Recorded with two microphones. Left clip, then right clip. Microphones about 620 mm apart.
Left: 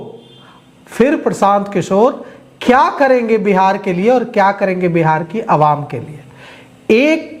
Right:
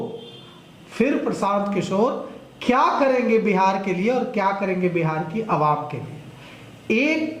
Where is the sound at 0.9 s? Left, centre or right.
Left.